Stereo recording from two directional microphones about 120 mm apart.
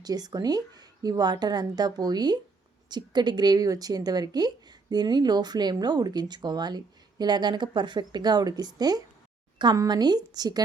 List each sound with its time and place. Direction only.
0.0 s a woman's voice: 35° right (ahead or behind)